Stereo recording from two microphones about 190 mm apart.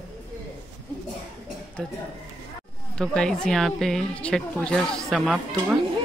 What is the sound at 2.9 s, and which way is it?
A woman's voice, 5° left (ahead or behind).